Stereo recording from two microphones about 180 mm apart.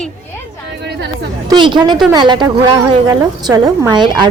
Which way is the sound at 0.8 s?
70° right (ahead or behind).